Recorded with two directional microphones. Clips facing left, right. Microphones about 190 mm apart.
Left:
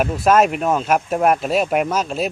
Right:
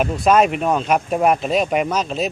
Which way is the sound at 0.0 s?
5° left (ahead or behind).